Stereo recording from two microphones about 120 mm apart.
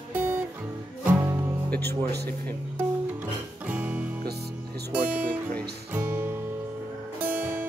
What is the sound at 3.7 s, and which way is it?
Music, 15° right (ahead or behind).